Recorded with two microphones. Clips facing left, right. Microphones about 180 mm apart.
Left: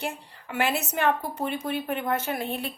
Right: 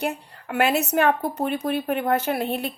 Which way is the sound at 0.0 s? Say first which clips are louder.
Right 6 dB; 60° right (ahead or behind).